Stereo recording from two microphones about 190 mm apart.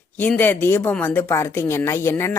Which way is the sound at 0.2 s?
10° left (ahead or behind).